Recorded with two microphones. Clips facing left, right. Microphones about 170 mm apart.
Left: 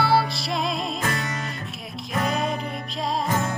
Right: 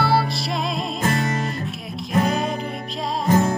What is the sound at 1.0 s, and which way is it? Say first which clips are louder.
Music: right 6 dB; 30° right (ahead or behind).